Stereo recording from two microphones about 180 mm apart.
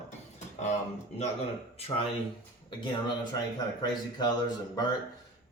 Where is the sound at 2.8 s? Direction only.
25° left (ahead or behind).